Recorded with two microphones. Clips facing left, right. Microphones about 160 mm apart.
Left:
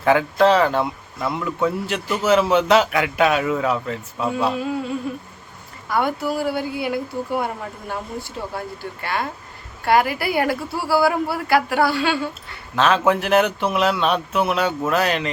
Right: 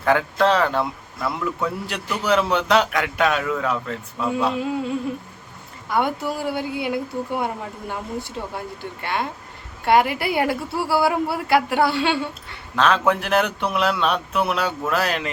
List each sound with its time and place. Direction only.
0.0 s speech: 5° left (ahead or behind)
5.9 s a woman's voice: 20° right (ahead or behind)
12.7 s speech: centre (ahead or behind)